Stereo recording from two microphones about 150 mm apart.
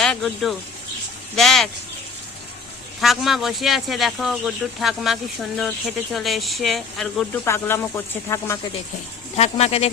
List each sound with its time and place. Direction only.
0.0 s speech: centre (ahead or behind)
3.0 s speech: centre (ahead or behind)
7.4 s speech: 15° left (ahead or behind)
9.3 s speech: 45° left (ahead or behind)